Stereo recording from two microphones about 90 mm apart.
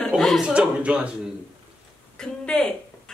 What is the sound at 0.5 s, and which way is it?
Speech, 10° right (ahead or behind).